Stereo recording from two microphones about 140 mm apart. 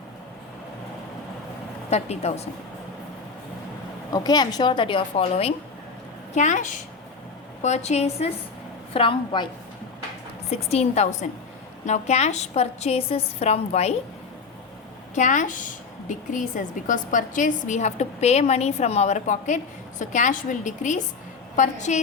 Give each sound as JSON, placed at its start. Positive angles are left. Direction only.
{"t": 1.9, "sound": "a woman's voice", "side_deg": 50}
{"t": 4.1, "sound": "a woman's voice", "side_deg": 30}
{"t": 6.3, "sound": "a woman's voice", "side_deg": 60}
{"t": 8.9, "sound": "a woman's voice", "side_deg": 40}
{"t": 10.5, "sound": "a woman's voice", "side_deg": 50}
{"t": 15.1, "sound": "a woman's voice", "side_deg": 60}